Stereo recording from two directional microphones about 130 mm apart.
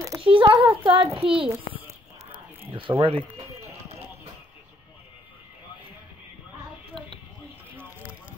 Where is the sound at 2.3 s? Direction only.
15° right (ahead or behind).